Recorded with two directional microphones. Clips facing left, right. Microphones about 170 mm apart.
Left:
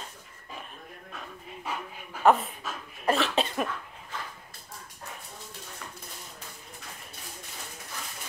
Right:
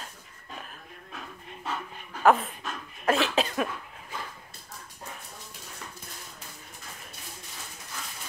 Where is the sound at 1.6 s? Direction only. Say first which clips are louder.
Right 1 dB; 10° left (ahead or behind).